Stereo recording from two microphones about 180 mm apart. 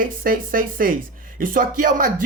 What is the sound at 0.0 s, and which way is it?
Speech, 50° right (ahead or behind).